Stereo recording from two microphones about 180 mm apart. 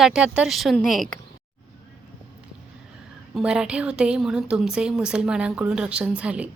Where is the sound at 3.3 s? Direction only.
5° right (ahead or behind).